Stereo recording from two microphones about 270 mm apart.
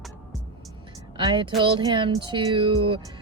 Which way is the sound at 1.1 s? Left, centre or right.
Centre.